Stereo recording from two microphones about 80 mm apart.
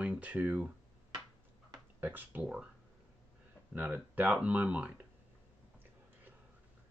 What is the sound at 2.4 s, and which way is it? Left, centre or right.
Speech, centre.